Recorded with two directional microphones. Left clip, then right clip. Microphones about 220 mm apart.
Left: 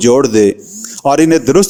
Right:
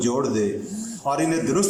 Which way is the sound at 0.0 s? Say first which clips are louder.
Left 14 dB; 45° left (ahead or behind).